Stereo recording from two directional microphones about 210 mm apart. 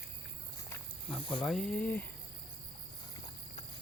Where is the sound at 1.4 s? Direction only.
Centre (ahead or behind).